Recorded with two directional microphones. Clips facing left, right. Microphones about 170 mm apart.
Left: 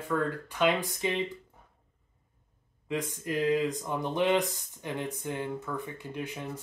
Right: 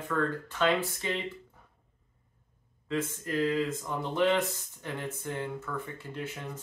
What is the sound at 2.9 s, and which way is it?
Speech, 15° left (ahead or behind).